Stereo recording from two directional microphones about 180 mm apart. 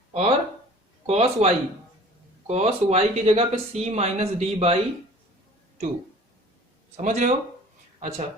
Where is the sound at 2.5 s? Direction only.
35° right (ahead or behind).